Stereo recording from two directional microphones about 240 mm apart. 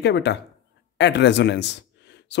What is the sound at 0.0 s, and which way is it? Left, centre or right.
Speech, left.